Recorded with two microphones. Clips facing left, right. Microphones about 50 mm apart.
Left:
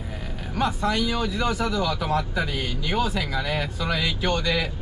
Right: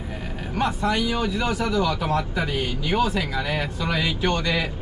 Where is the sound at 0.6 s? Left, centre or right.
Centre.